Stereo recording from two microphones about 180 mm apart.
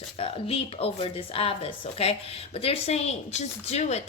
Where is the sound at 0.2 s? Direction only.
30° left (ahead or behind).